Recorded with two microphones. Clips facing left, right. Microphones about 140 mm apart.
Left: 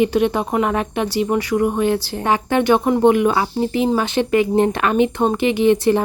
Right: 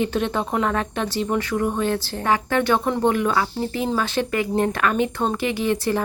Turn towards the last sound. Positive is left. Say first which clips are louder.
# left 7 dB
turn(degrees=20)  # may be behind; listen again after turning